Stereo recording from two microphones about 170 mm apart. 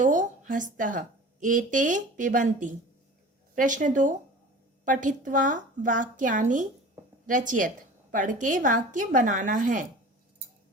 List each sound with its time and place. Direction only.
0.0 s a woman's voice: 50° right (ahead or behind)